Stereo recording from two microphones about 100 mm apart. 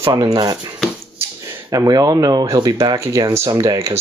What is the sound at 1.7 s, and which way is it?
Speech, 35° right (ahead or behind).